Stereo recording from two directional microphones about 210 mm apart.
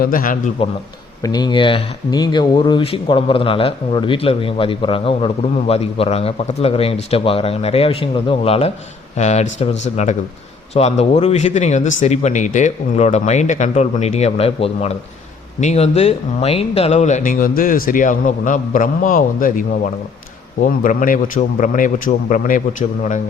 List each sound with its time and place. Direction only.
0.0 s speech: 40° left (ahead or behind)
1.2 s speech: 20° left (ahead or behind); by 23.2 s 35° left (ahead or behind)